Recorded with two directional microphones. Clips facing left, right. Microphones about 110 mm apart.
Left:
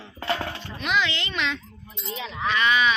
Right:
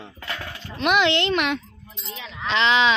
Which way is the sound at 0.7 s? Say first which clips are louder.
Right 7 dB; 65° right (ahead or behind).